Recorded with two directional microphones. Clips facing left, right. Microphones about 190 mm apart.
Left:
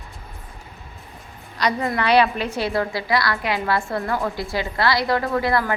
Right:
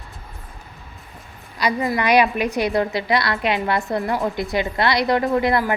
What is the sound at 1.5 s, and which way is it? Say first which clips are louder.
A woman's voice: right 1 dB; 5° right (ahead or behind).